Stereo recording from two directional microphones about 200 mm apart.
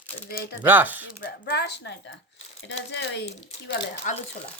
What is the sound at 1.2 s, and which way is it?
A woman's voice, 50° left (ahead or behind).